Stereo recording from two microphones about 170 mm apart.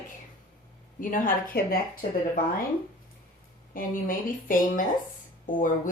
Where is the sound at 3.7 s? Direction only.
55° left (ahead or behind).